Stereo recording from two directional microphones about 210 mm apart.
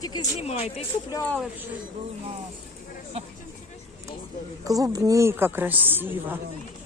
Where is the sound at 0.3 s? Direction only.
30° left (ahead or behind).